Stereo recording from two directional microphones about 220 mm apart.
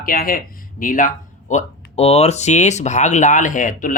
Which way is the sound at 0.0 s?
40° left (ahead or behind).